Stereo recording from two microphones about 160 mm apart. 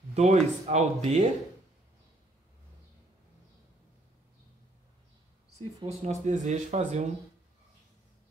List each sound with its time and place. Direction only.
0.1 s speech: 45° right (ahead or behind)
5.9 s speech: 45° right (ahead or behind)